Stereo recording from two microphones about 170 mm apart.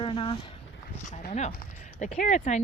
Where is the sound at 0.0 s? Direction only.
30° left (ahead or behind).